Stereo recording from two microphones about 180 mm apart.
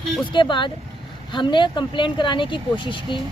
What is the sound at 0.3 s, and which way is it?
Speech, 25° left (ahead or behind).